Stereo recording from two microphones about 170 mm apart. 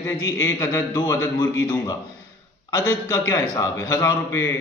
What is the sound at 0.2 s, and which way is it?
A man's voice, 15° left (ahead or behind).